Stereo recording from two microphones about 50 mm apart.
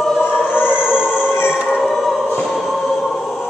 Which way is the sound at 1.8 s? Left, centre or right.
Centre.